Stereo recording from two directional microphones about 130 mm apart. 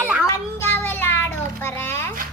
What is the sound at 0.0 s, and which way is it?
Child singing, 10° right (ahead or behind).